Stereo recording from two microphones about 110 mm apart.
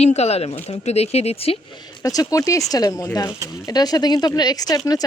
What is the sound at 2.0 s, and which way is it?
Speech, 30° left (ahead or behind).